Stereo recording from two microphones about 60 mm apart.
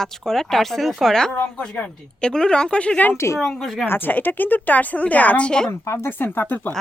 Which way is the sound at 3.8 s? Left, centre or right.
Left.